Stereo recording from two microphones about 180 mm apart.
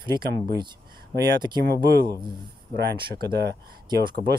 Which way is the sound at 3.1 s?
60° right (ahead or behind).